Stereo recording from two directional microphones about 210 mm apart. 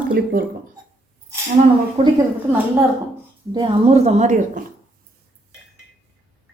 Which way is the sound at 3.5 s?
25° right (ahead or behind).